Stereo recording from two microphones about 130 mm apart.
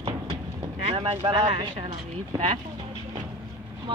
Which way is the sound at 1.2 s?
40° right (ahead or behind).